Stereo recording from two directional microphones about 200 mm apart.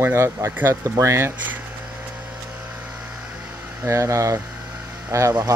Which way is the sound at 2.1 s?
5° right (ahead or behind).